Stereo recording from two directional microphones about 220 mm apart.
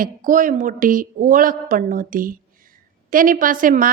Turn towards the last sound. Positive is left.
turn(degrees=-40)  # may be behind; listen again after turning